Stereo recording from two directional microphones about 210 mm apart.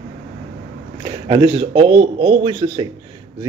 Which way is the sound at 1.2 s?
25° right (ahead or behind).